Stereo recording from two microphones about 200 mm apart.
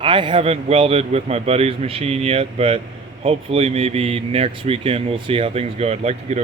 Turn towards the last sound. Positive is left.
turn(degrees=-30)  # may be behind; listen again after turning